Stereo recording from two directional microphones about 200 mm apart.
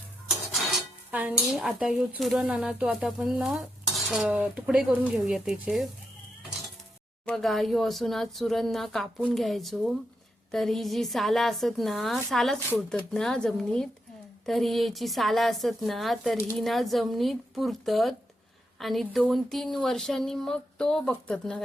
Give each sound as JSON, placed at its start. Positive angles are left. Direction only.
{"t": 0.5, "sound": "dishes", "side_deg": -5}
{"t": 7.3, "sound": "dishes", "side_deg": 0}